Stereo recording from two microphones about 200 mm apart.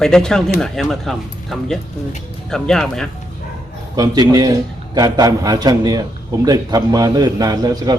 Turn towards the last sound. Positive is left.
turn(degrees=-20)  # may be behind; listen again after turning